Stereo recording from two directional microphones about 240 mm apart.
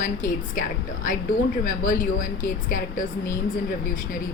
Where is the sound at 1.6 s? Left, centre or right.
Left.